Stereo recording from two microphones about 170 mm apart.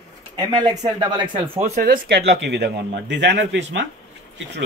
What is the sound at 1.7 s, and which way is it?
Speech, 60° right (ahead or behind).